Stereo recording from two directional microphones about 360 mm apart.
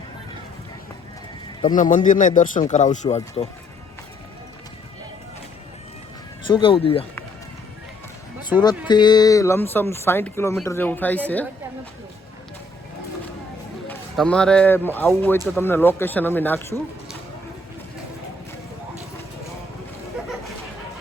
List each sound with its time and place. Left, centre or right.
1.6 s speech: left
6.5 s speech: centre
8.5 s speech: centre
8.9 s speech: centre
13.8 s speech: centre